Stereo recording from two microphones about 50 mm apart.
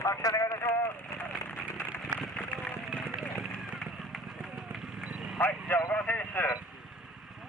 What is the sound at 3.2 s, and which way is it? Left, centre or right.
Run, right.